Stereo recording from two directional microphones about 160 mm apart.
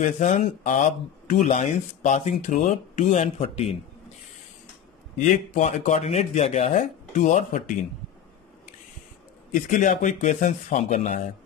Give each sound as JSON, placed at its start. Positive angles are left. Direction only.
{"t": 0.0, "sound": "speech", "side_deg": 45}
{"t": 5.2, "sound": "speech", "side_deg": 50}
{"t": 9.5, "sound": "speech", "side_deg": 55}